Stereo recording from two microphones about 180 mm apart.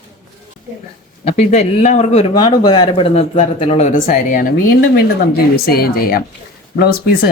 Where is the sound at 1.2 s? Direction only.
40° left (ahead or behind).